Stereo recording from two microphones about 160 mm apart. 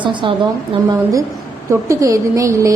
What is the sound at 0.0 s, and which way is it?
A woman's voice, 30° right (ahead or behind).